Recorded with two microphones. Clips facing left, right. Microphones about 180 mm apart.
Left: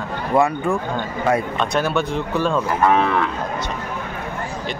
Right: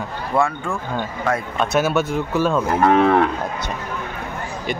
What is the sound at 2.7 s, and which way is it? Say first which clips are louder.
Moo: right 4 dB; 50° right (ahead or behind).